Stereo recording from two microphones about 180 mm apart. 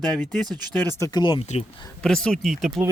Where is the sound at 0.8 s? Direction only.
15° left (ahead or behind).